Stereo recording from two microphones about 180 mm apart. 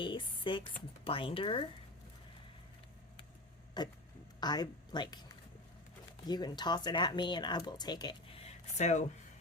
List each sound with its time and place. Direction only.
0.0 s speech: 30° left (ahead or behind)
3.8 s speech: 25° left (ahead or behind); by 9.0 s 40° left (ahead or behind)